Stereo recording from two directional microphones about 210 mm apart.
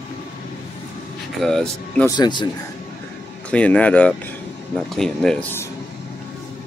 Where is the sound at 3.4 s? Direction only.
5° left (ahead or behind).